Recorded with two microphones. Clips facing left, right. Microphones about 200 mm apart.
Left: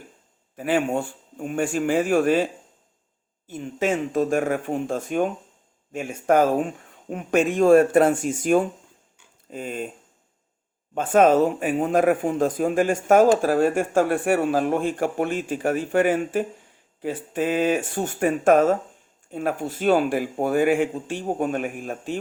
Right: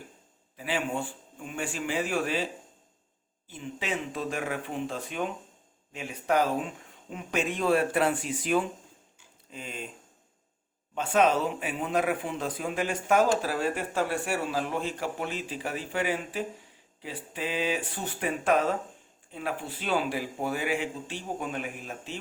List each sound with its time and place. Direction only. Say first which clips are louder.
0.5 s speech: left 8 dB; 50° left (ahead or behind)
3.5 s speech: left 9 dB; 45° left (ahead or behind)
10.9 s speech: left 7 dB; 50° left (ahead or behind)